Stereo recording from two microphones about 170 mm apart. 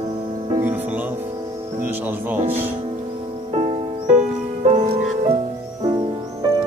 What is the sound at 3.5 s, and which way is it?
Music, 40° right (ahead or behind).